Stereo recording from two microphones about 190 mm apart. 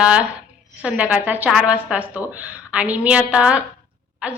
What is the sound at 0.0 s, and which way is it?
A woman's voice, 5° right (ahead or behind).